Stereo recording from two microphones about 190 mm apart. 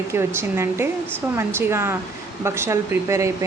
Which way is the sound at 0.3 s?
15° right (ahead or behind).